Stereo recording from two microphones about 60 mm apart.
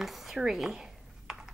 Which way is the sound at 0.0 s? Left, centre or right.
Centre.